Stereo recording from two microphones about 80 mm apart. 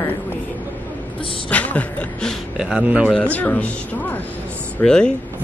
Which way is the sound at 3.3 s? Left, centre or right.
Centre.